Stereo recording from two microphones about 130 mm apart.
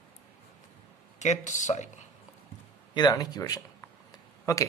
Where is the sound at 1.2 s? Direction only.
65° left (ahead or behind).